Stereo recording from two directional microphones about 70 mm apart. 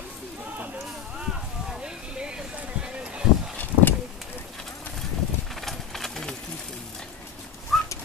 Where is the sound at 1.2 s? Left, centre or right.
Centre.